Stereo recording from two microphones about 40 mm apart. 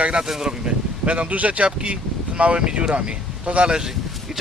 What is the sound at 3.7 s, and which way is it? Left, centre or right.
Speech, centre.